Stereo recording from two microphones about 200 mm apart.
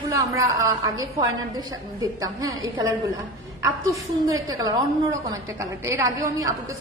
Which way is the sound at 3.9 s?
15° right (ahead or behind).